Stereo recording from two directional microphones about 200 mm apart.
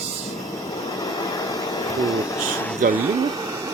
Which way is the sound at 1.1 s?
20° left (ahead or behind).